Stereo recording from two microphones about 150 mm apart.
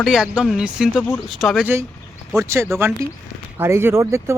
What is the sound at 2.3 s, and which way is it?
Speech, 20° right (ahead or behind).